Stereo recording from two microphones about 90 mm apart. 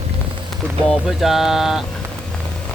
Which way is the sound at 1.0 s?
5° right (ahead or behind).